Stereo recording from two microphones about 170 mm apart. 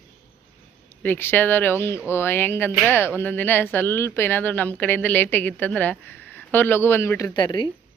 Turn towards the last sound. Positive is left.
turn(degrees=25)  # may be behind; listen again after turning